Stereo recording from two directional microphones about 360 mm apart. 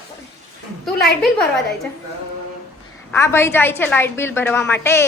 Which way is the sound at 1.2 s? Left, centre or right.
Centre.